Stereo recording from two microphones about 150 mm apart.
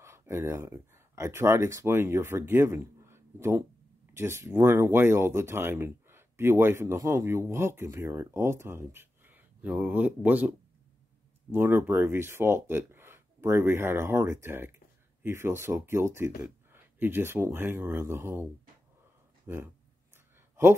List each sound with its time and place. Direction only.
0.0 s speech: 15° right (ahead or behind)
11.5 s speech: 15° right (ahead or behind)